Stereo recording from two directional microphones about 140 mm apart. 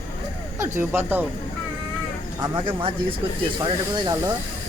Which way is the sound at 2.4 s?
35° right (ahead or behind).